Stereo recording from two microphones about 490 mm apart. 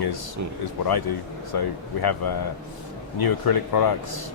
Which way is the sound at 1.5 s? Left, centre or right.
Left.